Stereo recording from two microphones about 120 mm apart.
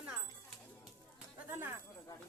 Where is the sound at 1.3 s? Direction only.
15° right (ahead or behind).